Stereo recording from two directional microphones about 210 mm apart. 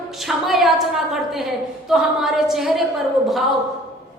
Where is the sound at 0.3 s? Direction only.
Centre (ahead or behind).